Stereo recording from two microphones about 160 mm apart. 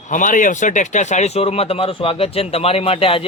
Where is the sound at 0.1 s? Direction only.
55° left (ahead or behind).